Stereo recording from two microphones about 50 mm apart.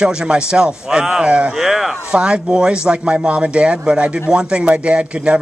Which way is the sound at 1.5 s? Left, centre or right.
Centre.